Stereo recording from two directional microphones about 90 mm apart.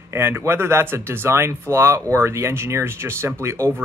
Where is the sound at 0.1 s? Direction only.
30° right (ahead or behind).